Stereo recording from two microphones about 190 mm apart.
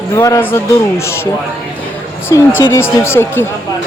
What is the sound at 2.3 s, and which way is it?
A woman's voice, 20° left (ahead or behind).